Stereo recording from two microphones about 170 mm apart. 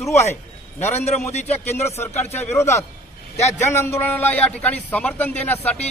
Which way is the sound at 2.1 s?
40° left (ahead or behind).